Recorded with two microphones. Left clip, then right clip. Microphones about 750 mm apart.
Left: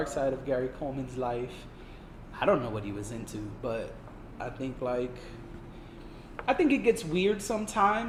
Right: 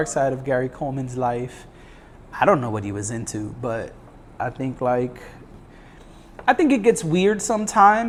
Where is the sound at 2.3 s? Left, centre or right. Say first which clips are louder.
Right 9 dB; right.